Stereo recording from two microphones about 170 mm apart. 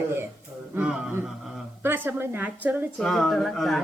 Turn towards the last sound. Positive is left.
turn(degrees=0)  # may be behind; listen again after turning